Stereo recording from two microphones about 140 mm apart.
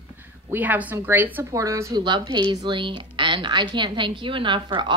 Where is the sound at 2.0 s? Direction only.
35° right (ahead or behind).